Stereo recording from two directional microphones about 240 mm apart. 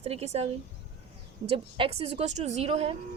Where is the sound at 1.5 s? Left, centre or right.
Right.